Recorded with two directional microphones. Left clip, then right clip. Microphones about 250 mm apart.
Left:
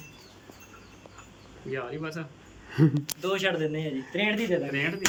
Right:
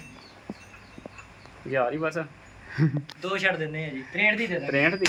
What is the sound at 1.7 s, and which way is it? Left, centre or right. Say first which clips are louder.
Speech: right 9 dB; right.